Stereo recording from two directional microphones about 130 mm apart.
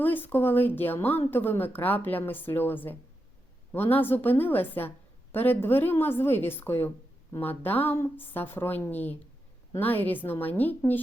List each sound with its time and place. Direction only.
0.0 s speech: 15° left (ahead or behind)